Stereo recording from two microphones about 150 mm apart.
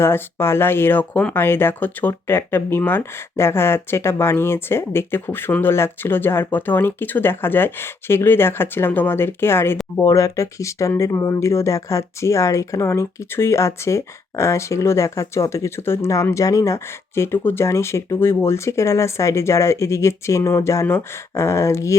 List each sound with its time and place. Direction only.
0.0 s speech: 15° left (ahead or behind)